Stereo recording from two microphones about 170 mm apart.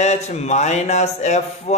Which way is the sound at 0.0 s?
40° left (ahead or behind).